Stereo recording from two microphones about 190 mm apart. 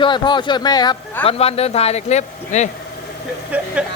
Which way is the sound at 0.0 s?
25° left (ahead or behind).